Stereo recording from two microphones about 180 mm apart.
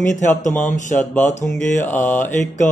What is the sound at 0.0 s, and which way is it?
Speech, 45° left (ahead or behind).